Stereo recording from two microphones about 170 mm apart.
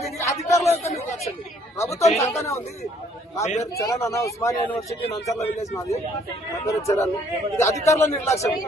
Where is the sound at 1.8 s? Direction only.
15° left (ahead or behind).